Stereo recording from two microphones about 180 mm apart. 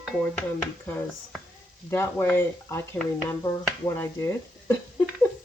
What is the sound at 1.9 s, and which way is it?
Speech, 10° left (ahead or behind).